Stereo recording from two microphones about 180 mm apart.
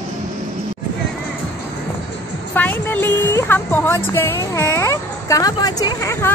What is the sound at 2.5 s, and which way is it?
A woman's voice, 10° left (ahead or behind).